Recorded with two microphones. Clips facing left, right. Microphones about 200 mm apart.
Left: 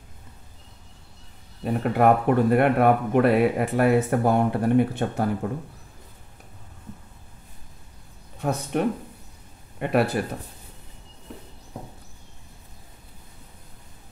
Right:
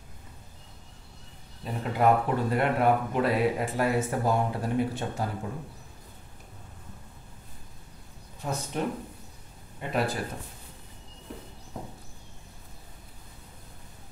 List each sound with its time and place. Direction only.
1.6 s speech: 60° left (ahead or behind)
8.4 s speech: 65° left (ahead or behind)